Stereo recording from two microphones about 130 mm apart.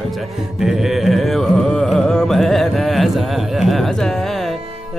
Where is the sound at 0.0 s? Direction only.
Centre (ahead or behind).